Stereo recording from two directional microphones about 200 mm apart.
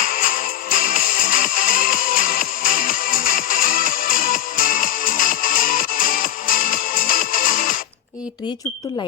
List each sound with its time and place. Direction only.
0.0 s music: 45° left (ahead or behind)